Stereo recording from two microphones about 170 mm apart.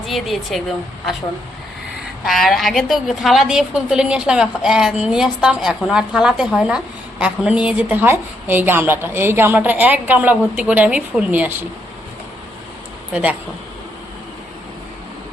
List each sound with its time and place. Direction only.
0.0 s speech: centre (ahead or behind)
2.2 s a woman's voice: centre (ahead or behind)